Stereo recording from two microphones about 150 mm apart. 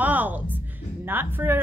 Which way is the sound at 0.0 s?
10° right (ahead or behind).